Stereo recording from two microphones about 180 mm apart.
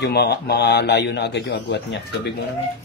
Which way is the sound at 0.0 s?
65° left (ahead or behind).